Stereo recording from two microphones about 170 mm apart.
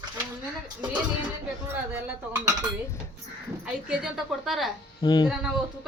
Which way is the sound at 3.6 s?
5° right (ahead or behind).